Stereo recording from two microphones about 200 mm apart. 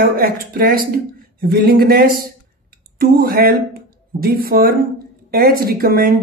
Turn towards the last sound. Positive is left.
turn(degrees=-50)  # may be behind; listen again after turning